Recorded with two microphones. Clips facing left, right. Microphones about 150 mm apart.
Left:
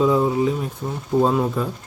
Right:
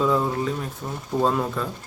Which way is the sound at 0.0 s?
10° left (ahead or behind).